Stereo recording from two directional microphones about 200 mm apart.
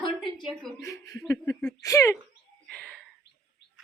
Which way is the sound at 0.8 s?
15° left (ahead or behind).